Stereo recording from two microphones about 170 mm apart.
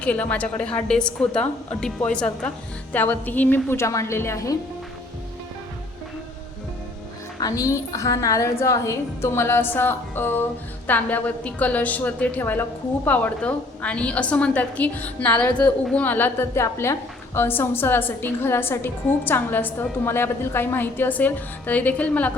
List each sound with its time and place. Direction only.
0.0 s a woman's voice: 10° left (ahead or behind)
7.3 s a woman's voice: 20° left (ahead or behind)